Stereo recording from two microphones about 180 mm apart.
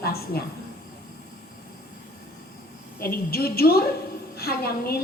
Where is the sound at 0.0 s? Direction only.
60° left (ahead or behind).